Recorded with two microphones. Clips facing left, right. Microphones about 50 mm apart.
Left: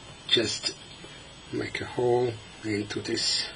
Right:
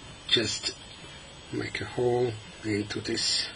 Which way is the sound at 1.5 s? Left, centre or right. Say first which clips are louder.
Left 1 dB; centre.